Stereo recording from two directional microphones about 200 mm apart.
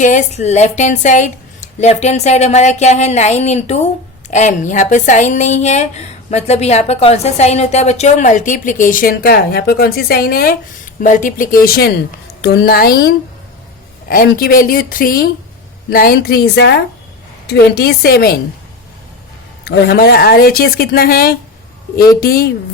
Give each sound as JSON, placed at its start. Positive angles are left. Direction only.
{"t": 0.0, "sound": "a woman's voice", "side_deg": 35}
{"t": 19.6, "sound": "speech", "side_deg": 55}